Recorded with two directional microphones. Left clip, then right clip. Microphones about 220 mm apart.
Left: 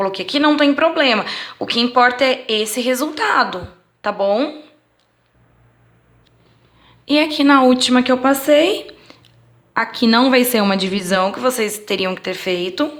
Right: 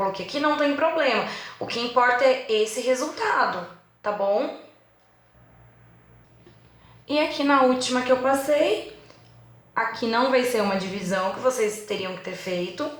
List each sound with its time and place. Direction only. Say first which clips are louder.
0.0 s speech: left 8 dB; 40° left (ahead or behind)
7.0 s speech: left 8 dB; 40° left (ahead or behind)
9.7 s speech: left 8 dB; 40° left (ahead or behind)